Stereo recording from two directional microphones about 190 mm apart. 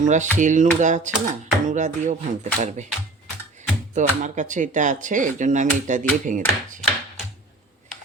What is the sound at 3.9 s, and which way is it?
Speech, 40° right (ahead or behind).